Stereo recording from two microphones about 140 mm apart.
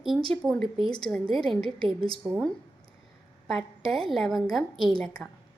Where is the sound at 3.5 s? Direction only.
Centre (ahead or behind).